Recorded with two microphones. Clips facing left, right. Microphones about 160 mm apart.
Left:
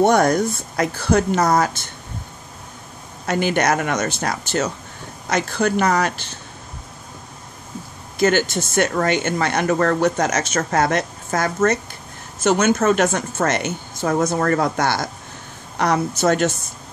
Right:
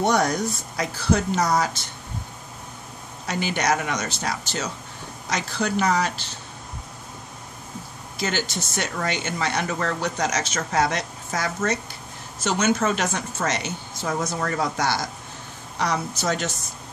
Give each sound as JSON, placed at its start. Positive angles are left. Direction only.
{"t": 0.0, "sound": "speech", "side_deg": 55}
{"t": 3.3, "sound": "speech", "side_deg": 55}
{"t": 8.2, "sound": "speech", "side_deg": 55}